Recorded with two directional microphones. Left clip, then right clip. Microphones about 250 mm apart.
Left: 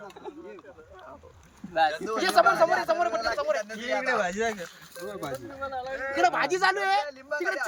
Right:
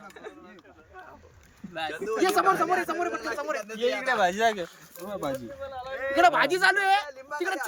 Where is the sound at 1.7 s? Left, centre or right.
Centre.